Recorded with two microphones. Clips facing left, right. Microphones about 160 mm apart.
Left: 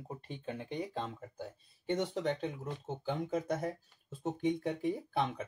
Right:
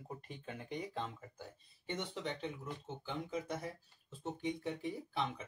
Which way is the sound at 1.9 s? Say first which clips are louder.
Left 8 dB; 45° left (ahead or behind).